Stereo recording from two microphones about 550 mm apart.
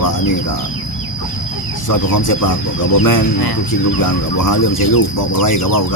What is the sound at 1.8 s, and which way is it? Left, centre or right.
Speech, left.